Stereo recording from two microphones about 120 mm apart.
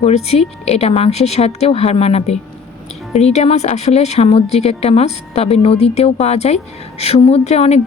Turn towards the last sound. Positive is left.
turn(degrees=65)  # may be behind; listen again after turning